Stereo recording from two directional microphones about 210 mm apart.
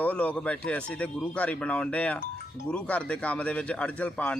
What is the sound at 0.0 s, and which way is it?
A man's voice, 5° left (ahead or behind).